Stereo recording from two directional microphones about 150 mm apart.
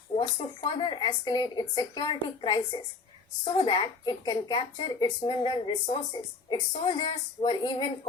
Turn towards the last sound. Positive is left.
turn(degrees=30)  # may be behind; listen again after turning